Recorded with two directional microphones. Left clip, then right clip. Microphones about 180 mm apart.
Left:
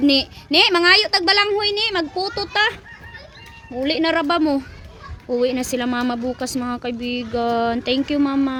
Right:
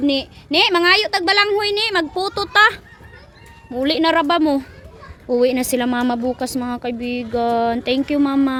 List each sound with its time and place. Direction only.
0.0 s a child's voice: 10° left (ahead or behind)
0.6 s speech: centre (ahead or behind)